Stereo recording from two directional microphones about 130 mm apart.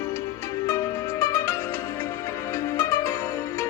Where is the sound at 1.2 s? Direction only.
20° left (ahead or behind).